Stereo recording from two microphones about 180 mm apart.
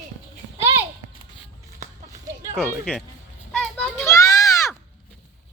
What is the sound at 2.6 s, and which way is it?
Speech, centre (ahead or behind).